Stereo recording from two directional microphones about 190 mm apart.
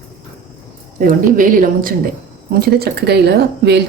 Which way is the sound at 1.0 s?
45° right (ahead or behind).